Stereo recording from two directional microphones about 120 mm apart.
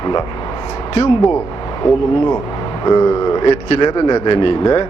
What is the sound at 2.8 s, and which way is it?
Speech, 30° left (ahead or behind).